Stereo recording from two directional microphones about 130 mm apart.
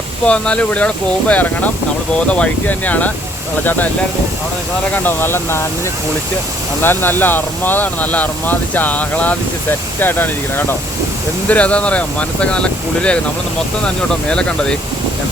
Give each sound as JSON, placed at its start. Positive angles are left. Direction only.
{"t": 0.3, "sound": "speech", "side_deg": 10}
{"t": 4.9, "sound": "speech", "side_deg": 15}
{"t": 6.8, "sound": "speech", "side_deg": 15}
{"t": 11.4, "sound": "speech", "side_deg": 10}